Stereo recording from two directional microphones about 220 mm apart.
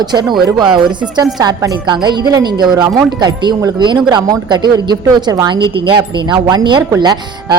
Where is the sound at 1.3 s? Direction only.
15° right (ahead or behind).